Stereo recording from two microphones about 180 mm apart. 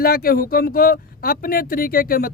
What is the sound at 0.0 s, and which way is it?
Speech, 55° left (ahead or behind).